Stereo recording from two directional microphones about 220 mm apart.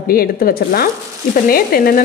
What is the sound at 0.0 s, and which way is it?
A woman's voice, 45° left (ahead or behind).